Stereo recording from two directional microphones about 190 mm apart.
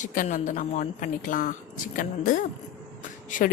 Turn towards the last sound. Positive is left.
turn(degrees=45)  # may be behind; listen again after turning